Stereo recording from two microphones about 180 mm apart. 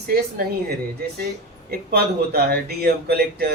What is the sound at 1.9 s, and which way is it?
Speech, 60° right (ahead or behind).